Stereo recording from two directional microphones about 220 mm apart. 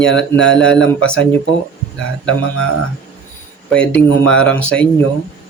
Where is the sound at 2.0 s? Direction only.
60° left (ahead or behind).